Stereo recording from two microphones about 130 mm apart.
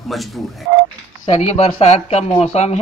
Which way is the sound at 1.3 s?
50° left (ahead or behind).